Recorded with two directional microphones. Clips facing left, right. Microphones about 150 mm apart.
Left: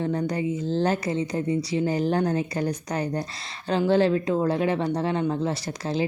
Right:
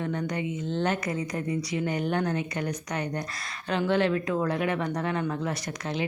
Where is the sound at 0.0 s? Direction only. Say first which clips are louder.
Left 4 dB; 30° left (ahead or behind).